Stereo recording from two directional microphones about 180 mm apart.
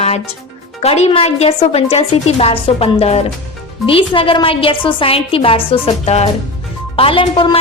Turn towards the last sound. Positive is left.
turn(degrees=30)  # may be behind; listen again after turning